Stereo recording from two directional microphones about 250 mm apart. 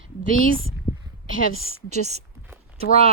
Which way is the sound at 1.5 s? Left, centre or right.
Right.